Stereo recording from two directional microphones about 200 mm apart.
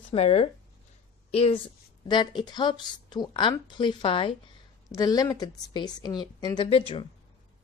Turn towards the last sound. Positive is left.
turn(degrees=25)  # may be behind; listen again after turning